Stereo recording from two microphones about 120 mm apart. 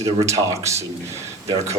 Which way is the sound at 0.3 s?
25° right (ahead or behind).